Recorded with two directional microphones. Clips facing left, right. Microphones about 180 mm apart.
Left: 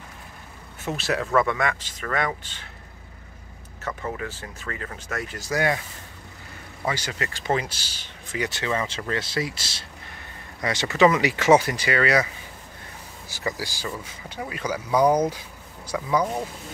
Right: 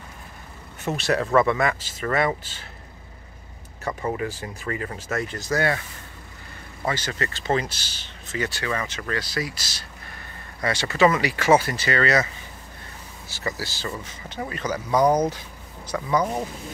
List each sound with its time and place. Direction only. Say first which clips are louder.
0.8 s speech: right 3 dB; centre (ahead or behind)
3.8 s speech: right 4 dB; 15° right (ahead or behind)
5.3 s speech: left 1 dB; 10° left (ahead or behind)
6.8 s speech: right 1 dB; 10° left (ahead or behind)
13.3 s speech: left 1 dB; 15° left (ahead or behind)